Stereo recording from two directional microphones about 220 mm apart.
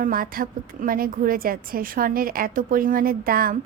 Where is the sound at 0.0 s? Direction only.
40° right (ahead or behind).